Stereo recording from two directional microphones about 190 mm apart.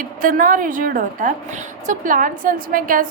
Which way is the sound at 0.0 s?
45° right (ahead or behind).